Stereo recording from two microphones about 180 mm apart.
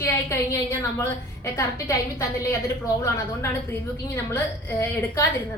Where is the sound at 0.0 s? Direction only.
15° left (ahead or behind).